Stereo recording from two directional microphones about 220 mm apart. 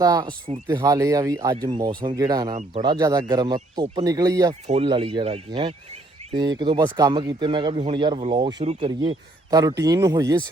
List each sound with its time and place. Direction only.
0.0 s speech: 20° right (ahead or behind)
4.6 s speech: 25° right (ahead or behind)
8.3 s speech: 20° right (ahead or behind)
8.6 s speech: 30° right (ahead or behind)
9.0 s speech: 15° right (ahead or behind)